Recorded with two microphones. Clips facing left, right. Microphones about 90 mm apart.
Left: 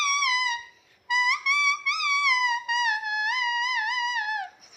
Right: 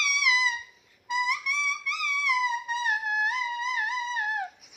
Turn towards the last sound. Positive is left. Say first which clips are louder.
# left 2 dB
turn(degrees=75)  # may be behind; listen again after turning